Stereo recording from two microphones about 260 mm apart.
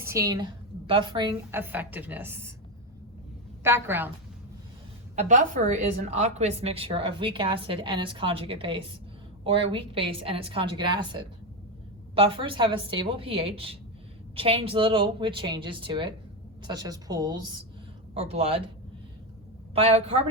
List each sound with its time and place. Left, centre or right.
0.0 s a woman's voice: centre
3.6 s a woman's voice: centre
5.1 s a woman's voice: right
19.7 s a woman's voice: right